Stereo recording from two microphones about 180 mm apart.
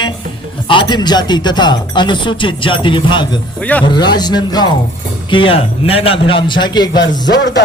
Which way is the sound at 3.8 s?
25° left (ahead or behind).